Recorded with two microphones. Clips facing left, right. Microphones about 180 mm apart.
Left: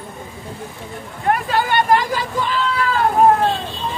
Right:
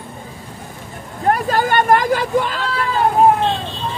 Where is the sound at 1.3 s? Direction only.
45° right (ahead or behind).